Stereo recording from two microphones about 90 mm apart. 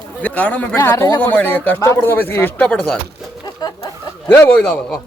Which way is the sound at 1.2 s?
15° left (ahead or behind).